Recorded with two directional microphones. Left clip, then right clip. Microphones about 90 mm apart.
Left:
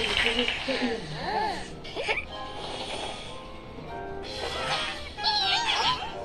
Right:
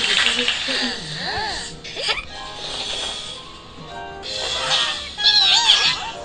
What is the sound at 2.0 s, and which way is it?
Music, 25° right (ahead or behind).